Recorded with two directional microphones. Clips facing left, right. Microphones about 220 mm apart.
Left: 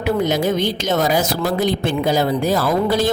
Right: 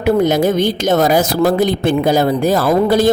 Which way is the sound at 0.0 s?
50° right (ahead or behind).